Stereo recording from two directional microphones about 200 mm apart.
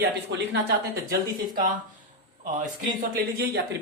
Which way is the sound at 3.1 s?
50° right (ahead or behind).